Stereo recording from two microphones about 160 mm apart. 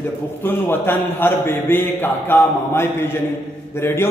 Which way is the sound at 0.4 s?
15° left (ahead or behind).